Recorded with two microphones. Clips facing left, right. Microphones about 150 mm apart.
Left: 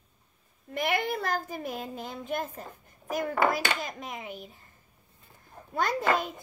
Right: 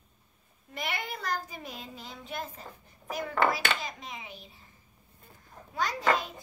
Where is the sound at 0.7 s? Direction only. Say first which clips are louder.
Left 8 dB; 55° left (ahead or behind).